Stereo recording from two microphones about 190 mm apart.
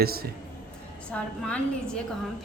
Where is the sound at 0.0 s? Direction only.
55° right (ahead or behind).